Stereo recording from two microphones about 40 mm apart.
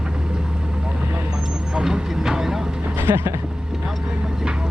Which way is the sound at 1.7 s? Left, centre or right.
Centre.